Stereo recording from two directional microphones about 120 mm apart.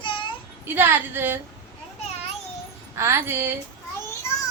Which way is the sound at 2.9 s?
25° right (ahead or behind).